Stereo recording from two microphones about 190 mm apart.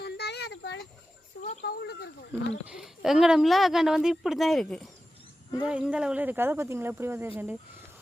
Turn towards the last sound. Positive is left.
turn(degrees=-10)  # may be behind; listen again after turning